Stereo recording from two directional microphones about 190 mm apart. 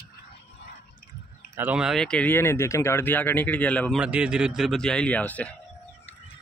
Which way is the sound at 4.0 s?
5° right (ahead or behind).